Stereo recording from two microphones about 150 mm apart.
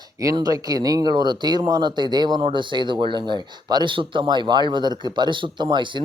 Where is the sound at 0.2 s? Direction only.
25° right (ahead or behind).